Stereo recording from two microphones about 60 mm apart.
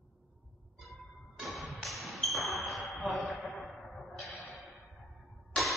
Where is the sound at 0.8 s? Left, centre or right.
Centre.